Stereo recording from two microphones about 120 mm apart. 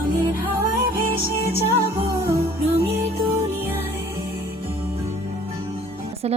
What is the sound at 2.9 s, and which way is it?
Music, 60° right (ahead or behind).